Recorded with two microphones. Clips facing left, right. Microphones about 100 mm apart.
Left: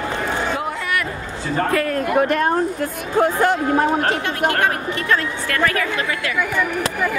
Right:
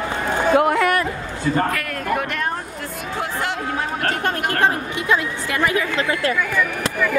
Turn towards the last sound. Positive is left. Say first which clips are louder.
# even
turn(degrees=-15)  # may be behind; listen again after turning